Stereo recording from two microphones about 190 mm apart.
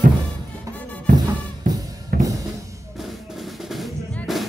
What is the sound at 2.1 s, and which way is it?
Drum kit, 55° right (ahead or behind).